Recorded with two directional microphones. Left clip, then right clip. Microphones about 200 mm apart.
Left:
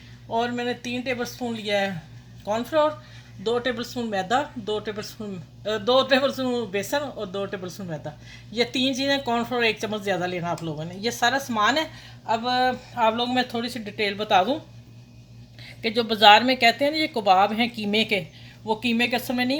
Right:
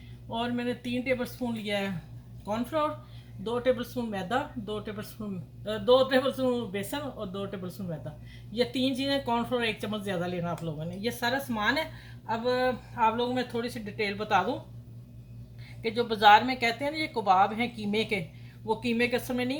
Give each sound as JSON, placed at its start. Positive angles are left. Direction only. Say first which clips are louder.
{"t": 0.3, "sound": "speech", "louder": "left 6 dB", "side_deg": 45}
{"t": 15.8, "sound": "speech", "louder": "left 5 dB", "side_deg": 50}